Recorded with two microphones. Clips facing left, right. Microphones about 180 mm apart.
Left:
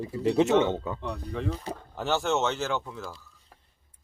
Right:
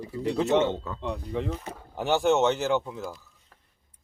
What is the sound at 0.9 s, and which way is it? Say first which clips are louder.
Speech: right 3 dB; 20° right (ahead or behind).